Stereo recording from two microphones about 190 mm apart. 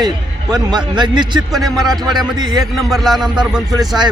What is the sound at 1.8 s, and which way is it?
Speech, centre (ahead or behind).